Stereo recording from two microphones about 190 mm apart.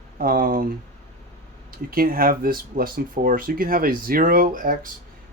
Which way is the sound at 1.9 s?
50° right (ahead or behind).